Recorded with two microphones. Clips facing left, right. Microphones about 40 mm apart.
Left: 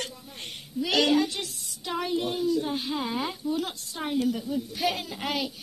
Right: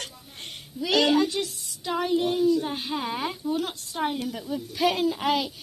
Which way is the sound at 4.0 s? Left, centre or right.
Right.